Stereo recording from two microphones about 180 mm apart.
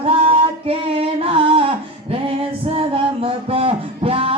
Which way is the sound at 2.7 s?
30° right (ahead or behind).